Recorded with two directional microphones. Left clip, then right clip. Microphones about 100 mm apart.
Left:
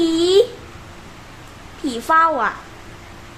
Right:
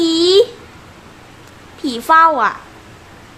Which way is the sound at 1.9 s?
35° right (ahead or behind).